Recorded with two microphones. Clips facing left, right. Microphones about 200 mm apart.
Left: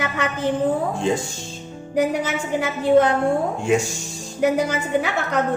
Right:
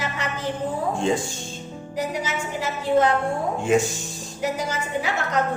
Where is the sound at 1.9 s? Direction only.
55° left (ahead or behind).